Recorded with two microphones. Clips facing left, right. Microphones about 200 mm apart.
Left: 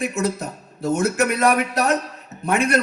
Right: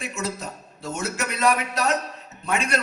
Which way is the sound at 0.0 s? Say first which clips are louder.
Left 7 dB; 55° left (ahead or behind).